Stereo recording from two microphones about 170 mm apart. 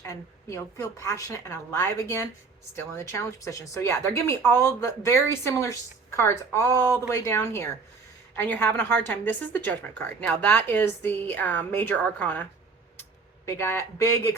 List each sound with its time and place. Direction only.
0.0 s a woman's voice: 20° left (ahead or behind)